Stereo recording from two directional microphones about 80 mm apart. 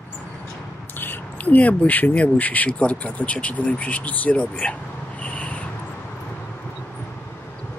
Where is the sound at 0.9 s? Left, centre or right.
Left.